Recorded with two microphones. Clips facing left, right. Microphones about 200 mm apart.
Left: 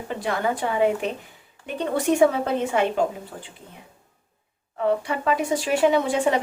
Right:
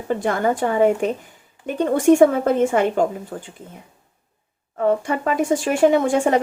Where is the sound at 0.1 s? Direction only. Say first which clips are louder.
Right 6 dB; 50° right (ahead or behind).